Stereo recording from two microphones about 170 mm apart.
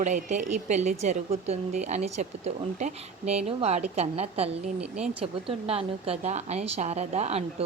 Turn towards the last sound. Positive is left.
turn(degrees=-40)  # may be behind; listen again after turning